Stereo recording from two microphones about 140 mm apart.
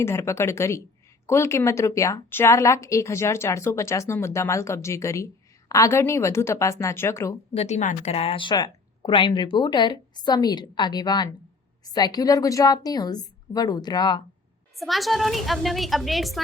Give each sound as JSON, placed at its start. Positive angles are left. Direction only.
{"t": 0.0, "sound": "a woman's voice", "side_deg": 20}
{"t": 7.5, "sound": "a woman's voice", "side_deg": 50}
{"t": 14.8, "sound": "a woman's voice", "side_deg": 0}